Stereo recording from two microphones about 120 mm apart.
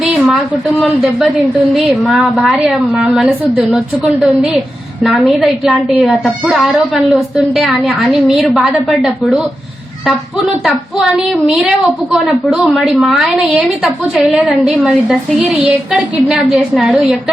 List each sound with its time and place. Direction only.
0.8 s a woman's voice: 5° right (ahead or behind)
10.6 s a woman's voice: 5° right (ahead or behind)